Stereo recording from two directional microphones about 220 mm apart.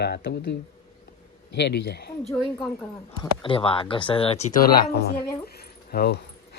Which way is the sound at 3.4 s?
25° left (ahead or behind).